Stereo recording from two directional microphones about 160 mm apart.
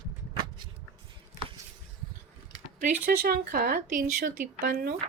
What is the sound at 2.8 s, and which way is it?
Speech, 70° right (ahead or behind).